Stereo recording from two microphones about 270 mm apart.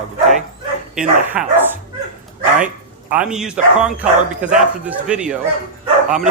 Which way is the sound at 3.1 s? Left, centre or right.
Centre.